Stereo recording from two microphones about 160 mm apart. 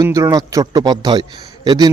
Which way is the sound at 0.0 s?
20° right (ahead or behind).